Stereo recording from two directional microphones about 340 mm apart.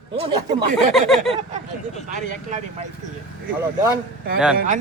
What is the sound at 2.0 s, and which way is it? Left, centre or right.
Speech, right.